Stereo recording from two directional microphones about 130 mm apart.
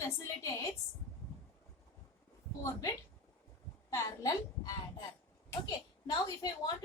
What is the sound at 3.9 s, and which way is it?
Speech, 25° left (ahead or behind).